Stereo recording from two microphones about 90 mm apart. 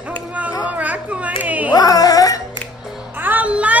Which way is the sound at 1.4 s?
15° right (ahead or behind).